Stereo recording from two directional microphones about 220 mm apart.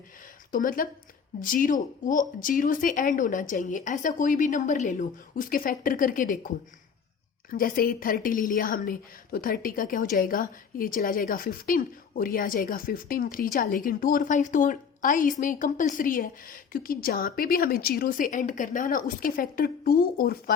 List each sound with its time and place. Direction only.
0.5 s a woman's voice: 40° left (ahead or behind)
7.5 s a woman's voice: 40° left (ahead or behind)